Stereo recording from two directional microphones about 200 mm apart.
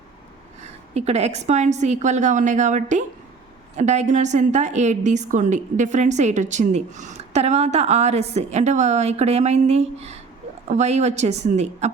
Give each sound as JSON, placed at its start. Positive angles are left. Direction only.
{"t": 0.9, "sound": "a woman's voice", "side_deg": -30}